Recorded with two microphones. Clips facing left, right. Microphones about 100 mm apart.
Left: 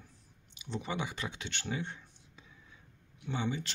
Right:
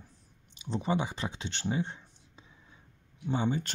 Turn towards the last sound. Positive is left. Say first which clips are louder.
# right 5 dB
turn(degrees=-40)  # may be behind; listen again after turning